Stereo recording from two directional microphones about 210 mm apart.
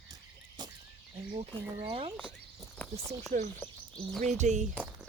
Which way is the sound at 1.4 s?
25° right (ahead or behind).